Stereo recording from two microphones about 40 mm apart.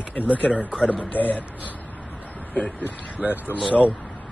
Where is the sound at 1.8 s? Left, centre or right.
Left.